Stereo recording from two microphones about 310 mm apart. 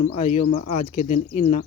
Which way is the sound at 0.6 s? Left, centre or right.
Left.